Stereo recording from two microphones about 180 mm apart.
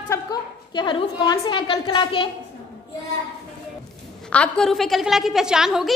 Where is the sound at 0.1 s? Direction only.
25° left (ahead or behind).